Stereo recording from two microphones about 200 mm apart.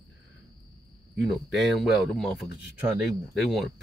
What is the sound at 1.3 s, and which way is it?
Speech, centre (ahead or behind).